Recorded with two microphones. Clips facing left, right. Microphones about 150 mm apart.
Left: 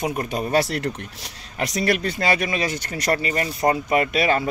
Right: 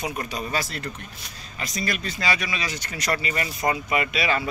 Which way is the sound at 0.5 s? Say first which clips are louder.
Left 12 dB; 70° left (ahead or behind).